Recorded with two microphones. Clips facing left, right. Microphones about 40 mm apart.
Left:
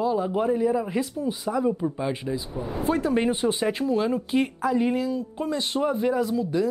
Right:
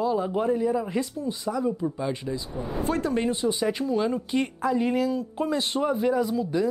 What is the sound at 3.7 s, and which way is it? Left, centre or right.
Speech, centre.